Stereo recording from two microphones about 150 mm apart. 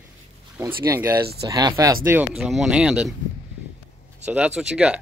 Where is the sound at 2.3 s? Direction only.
Centre (ahead or behind).